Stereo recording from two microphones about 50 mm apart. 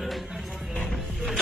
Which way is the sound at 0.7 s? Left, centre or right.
Left.